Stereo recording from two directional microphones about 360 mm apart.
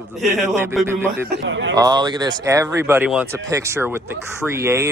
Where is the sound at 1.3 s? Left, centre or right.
Right.